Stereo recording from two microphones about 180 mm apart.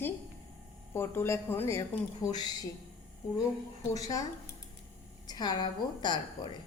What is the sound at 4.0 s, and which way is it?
Speech, 20° left (ahead or behind).